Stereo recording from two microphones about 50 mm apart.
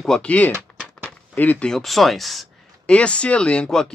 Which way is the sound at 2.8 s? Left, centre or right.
Left.